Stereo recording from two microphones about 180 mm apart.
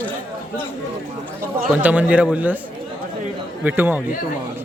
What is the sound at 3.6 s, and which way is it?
Speech, 10° right (ahead or behind).